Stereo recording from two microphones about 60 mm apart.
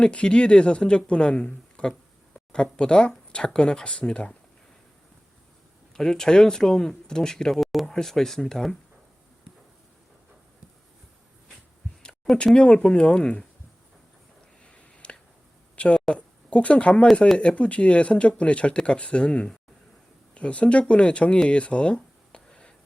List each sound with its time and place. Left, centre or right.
0.0 s speech: centre
5.9 s speech: centre
12.0 s speech: centre
14.7 s a sound: centre
17.3 s speech: centre